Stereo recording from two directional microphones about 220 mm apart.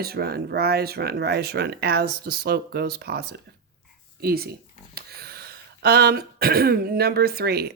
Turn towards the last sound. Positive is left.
turn(degrees=-45)  # may be behind; listen again after turning